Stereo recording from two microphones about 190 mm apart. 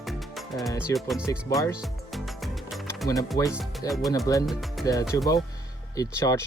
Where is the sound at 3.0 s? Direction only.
20° left (ahead or behind).